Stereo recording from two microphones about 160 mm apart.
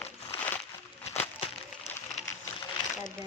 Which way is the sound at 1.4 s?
40° left (ahead or behind).